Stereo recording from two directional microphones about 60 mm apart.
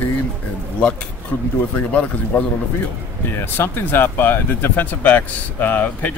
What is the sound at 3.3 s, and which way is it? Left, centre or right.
Speech, left.